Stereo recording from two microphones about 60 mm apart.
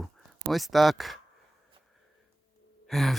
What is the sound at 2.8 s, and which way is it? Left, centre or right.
Gasp, centre.